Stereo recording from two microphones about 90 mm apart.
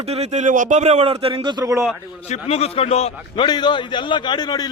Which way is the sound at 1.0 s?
90° right.